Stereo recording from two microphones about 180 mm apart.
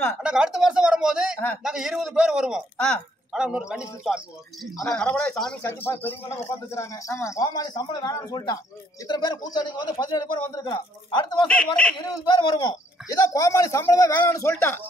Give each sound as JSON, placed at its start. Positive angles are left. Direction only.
{"t": 0.2, "sound": "a man's voice", "side_deg": -5}
{"t": 11.4, "sound": "speech", "side_deg": 5}
{"t": 12.3, "sound": "a man's voice", "side_deg": 25}